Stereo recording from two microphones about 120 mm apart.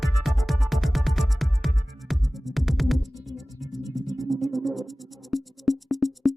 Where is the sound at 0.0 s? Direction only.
Centre (ahead or behind).